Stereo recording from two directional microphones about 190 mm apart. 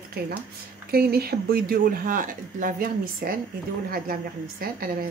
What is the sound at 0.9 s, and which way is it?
A woman's voice, 55° right (ahead or behind).